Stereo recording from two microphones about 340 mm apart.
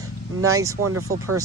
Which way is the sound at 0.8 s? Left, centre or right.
Right.